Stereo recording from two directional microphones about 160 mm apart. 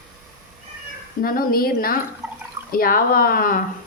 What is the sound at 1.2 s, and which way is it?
A woman's voice, 65° left (ahead or behind).